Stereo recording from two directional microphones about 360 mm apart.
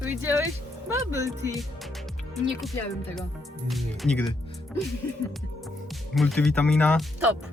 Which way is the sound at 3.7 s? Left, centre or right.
Centre.